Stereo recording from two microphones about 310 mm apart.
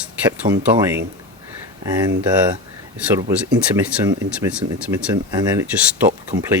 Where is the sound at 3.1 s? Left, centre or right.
Centre.